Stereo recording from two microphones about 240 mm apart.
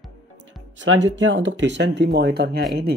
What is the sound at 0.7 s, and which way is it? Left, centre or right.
Speech, right.